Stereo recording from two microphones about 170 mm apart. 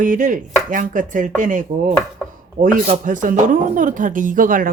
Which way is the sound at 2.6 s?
45° right (ahead or behind).